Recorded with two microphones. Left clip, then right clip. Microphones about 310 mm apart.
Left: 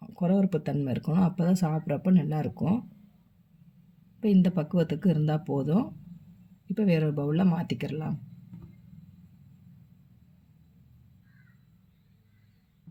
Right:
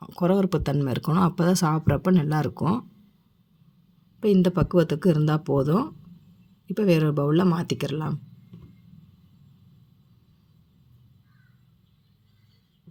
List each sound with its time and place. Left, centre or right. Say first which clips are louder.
0.0 s speech: right 5 dB; right
4.2 s speech: right 6 dB; right